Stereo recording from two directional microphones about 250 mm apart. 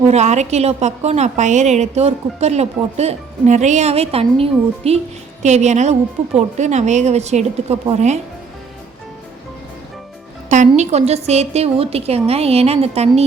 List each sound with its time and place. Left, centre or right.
0.1 s a woman's voice: right
10.5 s a woman's voice: right